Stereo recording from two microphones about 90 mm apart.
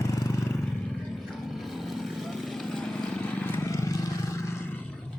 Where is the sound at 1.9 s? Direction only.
Centre (ahead or behind); by 3.5 s 15° left (ahead or behind).